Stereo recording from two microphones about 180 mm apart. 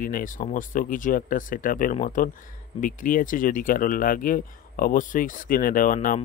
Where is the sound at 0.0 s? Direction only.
50° left (ahead or behind).